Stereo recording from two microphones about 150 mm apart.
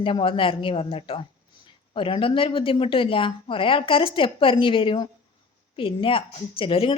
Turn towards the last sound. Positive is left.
turn(degrees=35)  # may be behind; listen again after turning